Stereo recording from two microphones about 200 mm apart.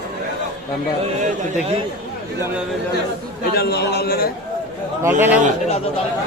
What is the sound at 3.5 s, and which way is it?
Speech, 55° left (ahead or behind).